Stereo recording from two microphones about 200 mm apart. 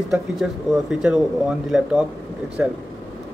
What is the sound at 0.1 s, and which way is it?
A man's voice, centre (ahead or behind).